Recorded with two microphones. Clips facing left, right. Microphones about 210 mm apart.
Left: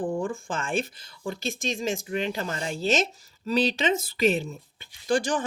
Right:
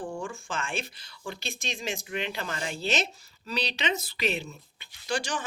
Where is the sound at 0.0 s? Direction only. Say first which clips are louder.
Left 7 dB; 35° left (ahead or behind).